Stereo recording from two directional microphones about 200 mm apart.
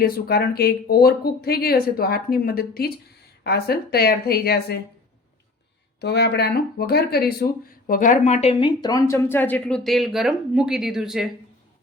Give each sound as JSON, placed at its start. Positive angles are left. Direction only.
{"t": 0.0, "sound": "speech", "side_deg": 50}
{"t": 6.0, "sound": "a woman's voice", "side_deg": 55}